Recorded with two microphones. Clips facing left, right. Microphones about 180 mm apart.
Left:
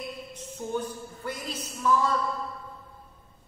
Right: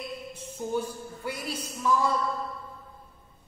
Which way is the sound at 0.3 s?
10° right (ahead or behind).